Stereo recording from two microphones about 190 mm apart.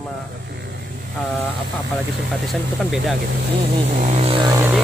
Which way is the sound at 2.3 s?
Centre (ahead or behind).